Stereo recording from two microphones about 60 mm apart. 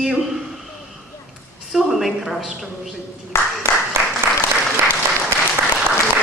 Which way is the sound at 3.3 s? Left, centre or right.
Left.